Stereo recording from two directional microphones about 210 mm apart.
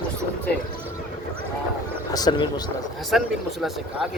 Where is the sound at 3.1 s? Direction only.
Centre (ahead or behind).